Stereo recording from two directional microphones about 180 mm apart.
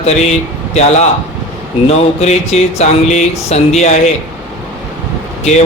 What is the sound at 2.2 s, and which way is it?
Speech, 40° left (ahead or behind).